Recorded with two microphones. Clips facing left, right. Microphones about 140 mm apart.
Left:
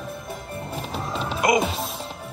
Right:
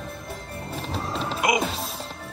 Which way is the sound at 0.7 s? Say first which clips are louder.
Even; centre (ahead or behind).